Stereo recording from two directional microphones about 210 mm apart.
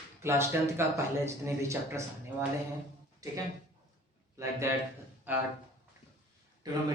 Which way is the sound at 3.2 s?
15° right (ahead or behind).